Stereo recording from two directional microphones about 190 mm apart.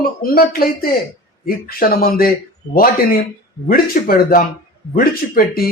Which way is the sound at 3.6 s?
50° left (ahead or behind).